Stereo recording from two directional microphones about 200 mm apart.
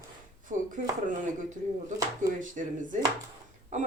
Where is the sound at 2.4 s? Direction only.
40° right (ahead or behind).